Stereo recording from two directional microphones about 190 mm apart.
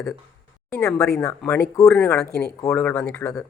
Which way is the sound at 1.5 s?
15° left (ahead or behind).